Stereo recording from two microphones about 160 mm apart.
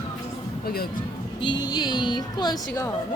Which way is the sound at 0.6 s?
75° left (ahead or behind).